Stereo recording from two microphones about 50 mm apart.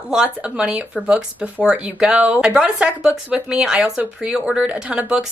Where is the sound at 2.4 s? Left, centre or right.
Centre.